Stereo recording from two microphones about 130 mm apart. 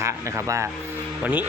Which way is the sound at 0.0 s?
20° right (ahead or behind).